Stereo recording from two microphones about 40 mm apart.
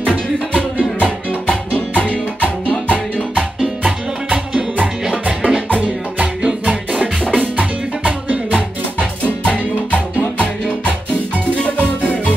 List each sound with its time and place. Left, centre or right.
0.9 s music: left
2.9 s music: left
3.6 s music: right
5.1 s music: right
7.2 s music: left
8.0 s music: right
9.4 s music: left
11.6 s music: left